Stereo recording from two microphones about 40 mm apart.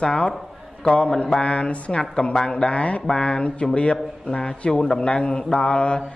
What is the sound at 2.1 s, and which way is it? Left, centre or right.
A man's voice, centre.